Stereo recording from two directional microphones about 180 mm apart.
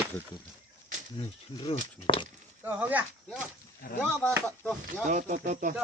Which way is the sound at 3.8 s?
55° left (ahead or behind).